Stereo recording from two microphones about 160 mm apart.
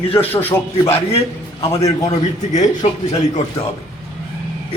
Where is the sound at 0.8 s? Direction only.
15° left (ahead or behind).